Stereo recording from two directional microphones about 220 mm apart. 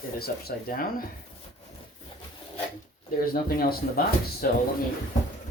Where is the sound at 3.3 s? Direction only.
40° left (ahead or behind).